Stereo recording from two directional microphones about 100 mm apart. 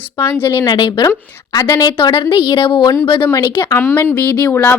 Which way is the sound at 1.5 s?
30° left (ahead or behind).